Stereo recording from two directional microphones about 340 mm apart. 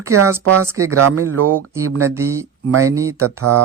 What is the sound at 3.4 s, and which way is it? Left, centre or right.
Speech, right.